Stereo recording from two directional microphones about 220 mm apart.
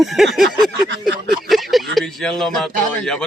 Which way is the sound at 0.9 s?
50° right (ahead or behind).